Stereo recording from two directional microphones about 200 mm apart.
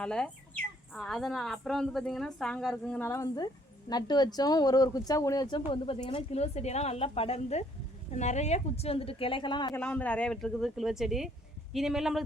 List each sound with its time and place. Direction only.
0.0 s a woman's voice: 5° left (ahead or behind); by 9.7 s 20° left (ahead or behind)
9.7 s speech: 5° left (ahead or behind)